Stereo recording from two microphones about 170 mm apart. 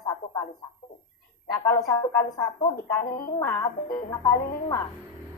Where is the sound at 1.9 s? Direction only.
20° left (ahead or behind).